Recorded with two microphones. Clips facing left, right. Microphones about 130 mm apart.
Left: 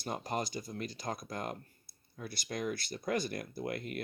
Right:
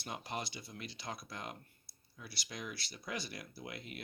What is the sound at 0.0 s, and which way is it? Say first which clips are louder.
Speech: left 6 dB; 40° left (ahead or behind).